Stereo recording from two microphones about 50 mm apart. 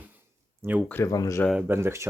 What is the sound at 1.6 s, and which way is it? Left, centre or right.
Speech, right.